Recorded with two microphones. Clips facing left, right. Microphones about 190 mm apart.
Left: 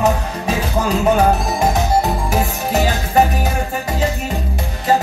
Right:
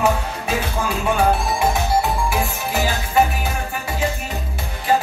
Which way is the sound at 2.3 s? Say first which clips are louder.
Left 4 dB; 40° left (ahead or behind).